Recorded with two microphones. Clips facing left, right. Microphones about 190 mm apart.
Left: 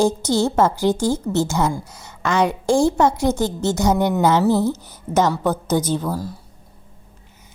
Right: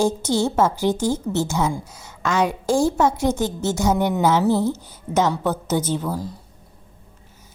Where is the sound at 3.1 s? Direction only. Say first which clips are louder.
Left 2 dB; 10° left (ahead or behind).